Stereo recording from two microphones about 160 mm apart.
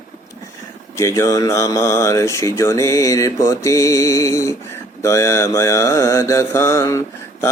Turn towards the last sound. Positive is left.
turn(degrees=20)  # may be behind; listen again after turning